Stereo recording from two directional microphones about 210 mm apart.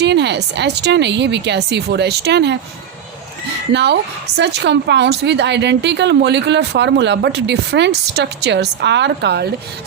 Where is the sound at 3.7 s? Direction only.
55° right (ahead or behind).